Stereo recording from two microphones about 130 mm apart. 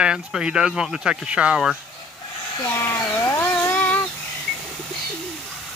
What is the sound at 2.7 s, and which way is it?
Cat, 15° left (ahead or behind).